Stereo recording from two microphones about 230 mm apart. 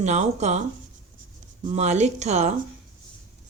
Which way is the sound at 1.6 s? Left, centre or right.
Right.